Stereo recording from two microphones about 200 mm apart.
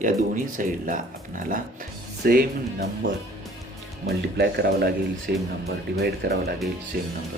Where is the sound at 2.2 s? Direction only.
45° right (ahead or behind).